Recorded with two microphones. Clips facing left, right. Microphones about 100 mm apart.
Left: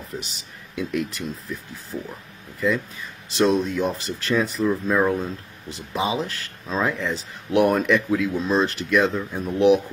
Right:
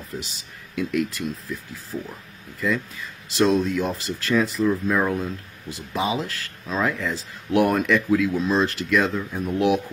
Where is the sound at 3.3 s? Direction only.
30° left (ahead or behind).